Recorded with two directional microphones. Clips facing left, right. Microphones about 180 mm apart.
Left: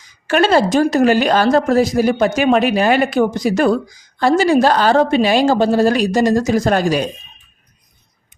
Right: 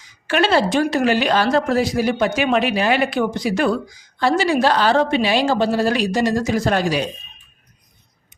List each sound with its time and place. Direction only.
0.3 s speech: 45° left (ahead or behind)